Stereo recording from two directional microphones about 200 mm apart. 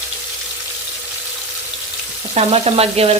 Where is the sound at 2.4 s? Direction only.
30° right (ahead or behind).